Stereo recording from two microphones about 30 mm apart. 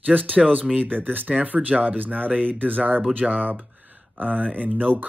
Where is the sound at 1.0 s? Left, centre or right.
Right.